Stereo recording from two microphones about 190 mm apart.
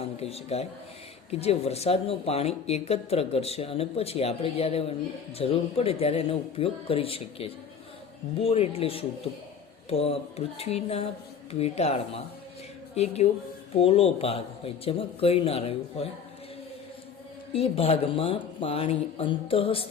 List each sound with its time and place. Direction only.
0.0 s a man's voice: 30° left (ahead or behind)
13.7 s speech: 30° left (ahead or behind)
17.5 s speech: 30° left (ahead or behind)